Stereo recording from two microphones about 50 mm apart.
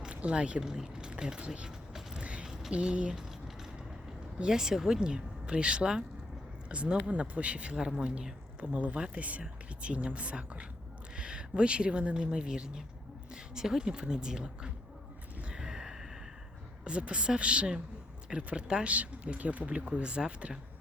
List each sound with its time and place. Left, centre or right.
0.1 s a sound: right
2.7 s speech: right
4.4 s speech: centre
15.4 s gasp: centre
16.8 s speech: right